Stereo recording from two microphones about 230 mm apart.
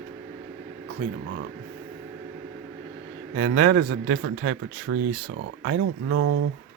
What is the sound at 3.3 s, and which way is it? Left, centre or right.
Speech, right.